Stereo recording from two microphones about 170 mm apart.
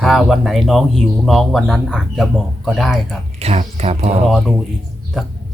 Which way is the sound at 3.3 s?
40° right (ahead or behind).